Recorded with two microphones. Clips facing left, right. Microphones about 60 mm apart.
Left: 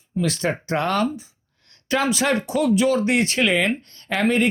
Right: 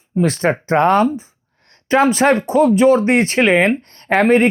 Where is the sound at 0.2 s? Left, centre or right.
Right.